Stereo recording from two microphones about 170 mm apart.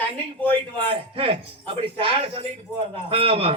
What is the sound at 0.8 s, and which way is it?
A man's voice, 35° right (ahead or behind).